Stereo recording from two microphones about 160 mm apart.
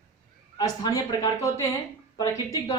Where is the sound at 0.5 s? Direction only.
20° left (ahead or behind).